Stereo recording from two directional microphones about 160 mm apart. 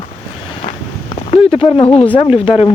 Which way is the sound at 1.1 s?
35° left (ahead or behind).